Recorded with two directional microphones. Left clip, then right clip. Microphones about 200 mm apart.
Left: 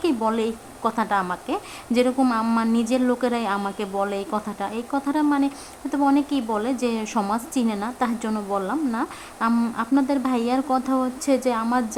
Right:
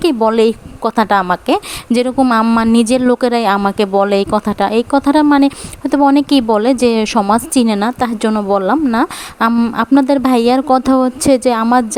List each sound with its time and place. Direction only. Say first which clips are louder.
0.0 s a woman's voice: right 11 dB; 40° right (ahead or behind)
9.5 s speech: right 8 dB; 25° right (ahead or behind)
9.7 s speech: right 11 dB; 40° right (ahead or behind)